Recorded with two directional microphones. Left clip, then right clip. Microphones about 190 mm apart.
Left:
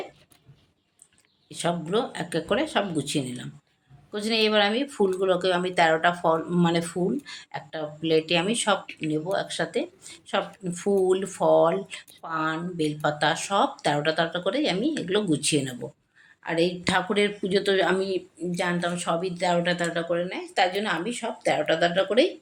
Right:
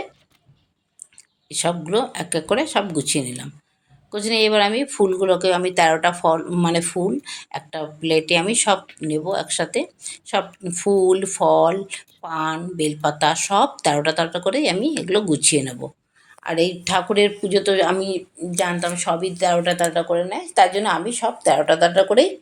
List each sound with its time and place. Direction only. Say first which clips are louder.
1.5 s speech: right 5 dB; 10° right (ahead or behind)
18.5 s speech: right 6 dB; 5° right (ahead or behind)